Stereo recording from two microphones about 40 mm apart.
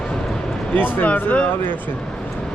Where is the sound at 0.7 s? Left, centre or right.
Left.